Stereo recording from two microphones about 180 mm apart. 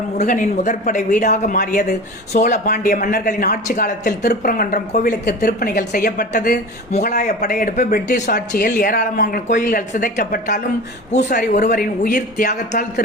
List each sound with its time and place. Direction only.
0.2 s speech: 45° left (ahead or behind)
4.9 s speech: 40° left (ahead or behind)
5.2 s speech: 55° left (ahead or behind)